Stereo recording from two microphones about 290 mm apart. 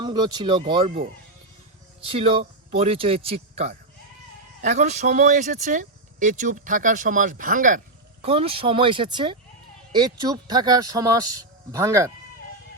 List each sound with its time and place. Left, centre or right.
0.0 s speech: centre
2.0 s speech: centre